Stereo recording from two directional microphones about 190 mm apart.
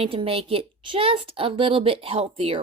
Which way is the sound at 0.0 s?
30° right (ahead or behind).